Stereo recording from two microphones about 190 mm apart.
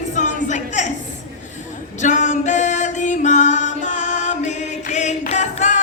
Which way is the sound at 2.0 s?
40° left (ahead or behind).